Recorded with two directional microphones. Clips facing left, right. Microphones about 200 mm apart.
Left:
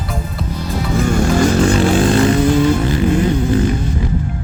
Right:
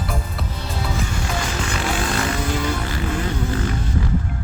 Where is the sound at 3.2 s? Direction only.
20° left (ahead or behind).